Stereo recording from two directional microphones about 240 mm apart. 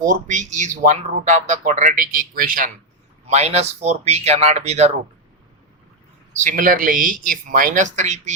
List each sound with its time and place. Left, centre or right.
0.0 s speech: right
6.3 s speech: right